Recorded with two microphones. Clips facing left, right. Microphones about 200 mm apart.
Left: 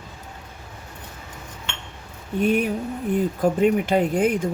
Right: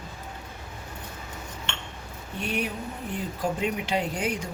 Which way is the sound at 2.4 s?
50° left (ahead or behind).